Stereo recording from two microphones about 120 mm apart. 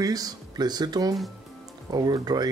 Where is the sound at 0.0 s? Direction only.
30° right (ahead or behind).